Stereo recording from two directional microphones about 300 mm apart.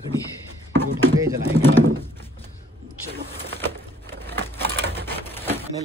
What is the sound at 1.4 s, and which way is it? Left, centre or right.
Speech, centre.